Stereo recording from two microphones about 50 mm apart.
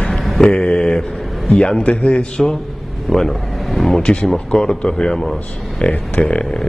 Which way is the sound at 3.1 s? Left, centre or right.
Centre.